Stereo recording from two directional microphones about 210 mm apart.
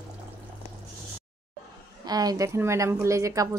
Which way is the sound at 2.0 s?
20° right (ahead or behind).